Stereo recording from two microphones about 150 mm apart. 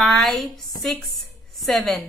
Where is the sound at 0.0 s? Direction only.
Centre (ahead or behind).